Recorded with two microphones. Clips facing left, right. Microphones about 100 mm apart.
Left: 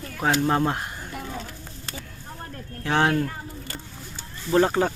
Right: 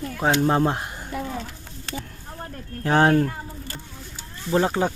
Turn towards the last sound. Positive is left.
turn(degrees=-10)  # may be behind; listen again after turning